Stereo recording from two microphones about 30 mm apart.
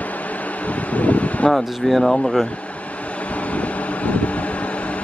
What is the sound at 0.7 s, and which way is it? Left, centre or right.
Wind, left.